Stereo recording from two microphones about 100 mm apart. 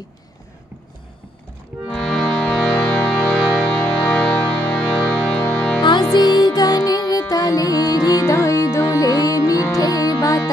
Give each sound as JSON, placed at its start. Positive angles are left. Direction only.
{"t": 1.9, "sound": "music", "side_deg": 5}
{"t": 5.8, "sound": "music", "side_deg": 50}